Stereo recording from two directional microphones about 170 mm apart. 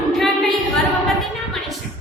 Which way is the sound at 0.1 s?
Centre (ahead or behind).